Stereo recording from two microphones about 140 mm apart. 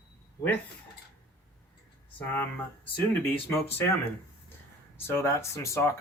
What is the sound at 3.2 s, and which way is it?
Speech, 15° left (ahead or behind).